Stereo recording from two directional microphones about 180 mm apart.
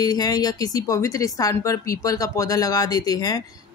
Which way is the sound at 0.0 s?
20° left (ahead or behind).